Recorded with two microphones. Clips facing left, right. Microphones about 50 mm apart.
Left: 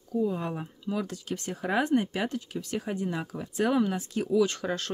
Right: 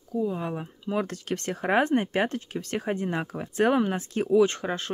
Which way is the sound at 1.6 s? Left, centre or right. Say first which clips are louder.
Right 3 dB; right.